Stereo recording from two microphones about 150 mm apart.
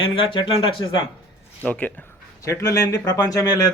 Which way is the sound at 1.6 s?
10° left (ahead or behind).